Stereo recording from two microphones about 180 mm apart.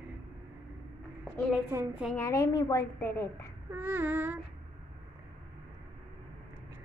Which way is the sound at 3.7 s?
10° right (ahead or behind).